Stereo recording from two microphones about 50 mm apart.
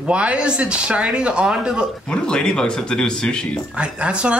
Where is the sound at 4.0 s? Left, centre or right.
Right.